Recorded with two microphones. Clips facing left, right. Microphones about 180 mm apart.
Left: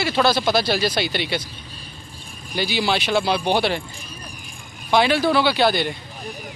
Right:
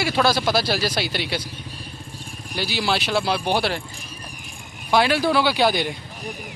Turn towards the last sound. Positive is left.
turn(degrees=-10)  # may be behind; listen again after turning